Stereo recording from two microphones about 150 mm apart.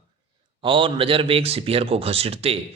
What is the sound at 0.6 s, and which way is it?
A man's voice, 35° right (ahead or behind).